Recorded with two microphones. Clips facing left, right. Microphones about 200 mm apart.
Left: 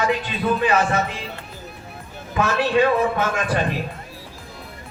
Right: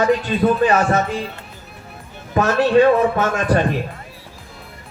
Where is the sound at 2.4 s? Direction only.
40° right (ahead or behind).